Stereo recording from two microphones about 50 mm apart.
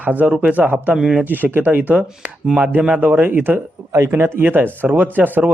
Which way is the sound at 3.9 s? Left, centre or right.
Right.